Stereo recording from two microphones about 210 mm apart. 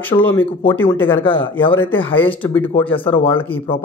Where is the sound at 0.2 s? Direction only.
10° left (ahead or behind).